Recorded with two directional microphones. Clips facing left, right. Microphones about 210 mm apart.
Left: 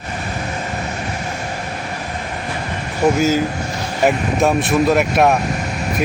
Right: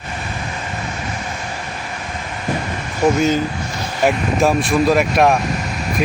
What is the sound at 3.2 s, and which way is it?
Speech, 5° left (ahead or behind).